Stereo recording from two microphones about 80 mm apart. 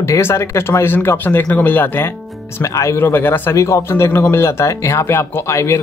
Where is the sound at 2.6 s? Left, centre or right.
Left.